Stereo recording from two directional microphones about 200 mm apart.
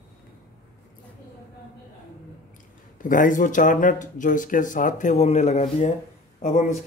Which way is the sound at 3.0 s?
40° left (ahead or behind).